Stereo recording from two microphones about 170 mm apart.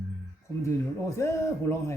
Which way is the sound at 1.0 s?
15° left (ahead or behind).